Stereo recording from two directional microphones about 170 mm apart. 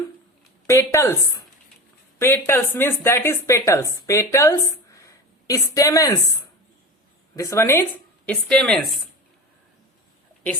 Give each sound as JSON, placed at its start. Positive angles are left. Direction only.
{"t": 0.7, "sound": "a woman's voice", "side_deg": 15}
{"t": 7.3, "sound": "a woman's voice", "side_deg": 15}